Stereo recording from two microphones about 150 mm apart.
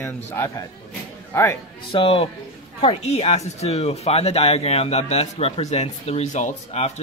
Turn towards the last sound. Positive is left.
turn(degrees=50)  # may be behind; listen again after turning